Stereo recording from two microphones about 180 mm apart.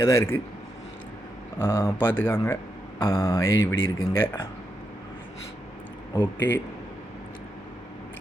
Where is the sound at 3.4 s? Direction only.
90° left.